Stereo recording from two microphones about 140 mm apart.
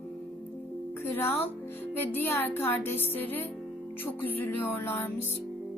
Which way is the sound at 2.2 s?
15° left (ahead or behind).